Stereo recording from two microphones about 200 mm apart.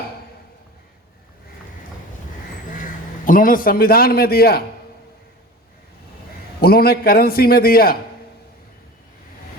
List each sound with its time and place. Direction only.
2.6 s a man's voice: 40° left (ahead or behind)
6.6 s a man's voice: 50° left (ahead or behind)